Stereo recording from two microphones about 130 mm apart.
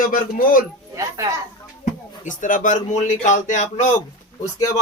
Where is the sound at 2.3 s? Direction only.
85° left; by 3.8 s 70° left (ahead or behind).